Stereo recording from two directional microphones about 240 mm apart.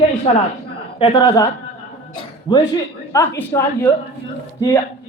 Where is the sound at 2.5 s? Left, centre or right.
Centre.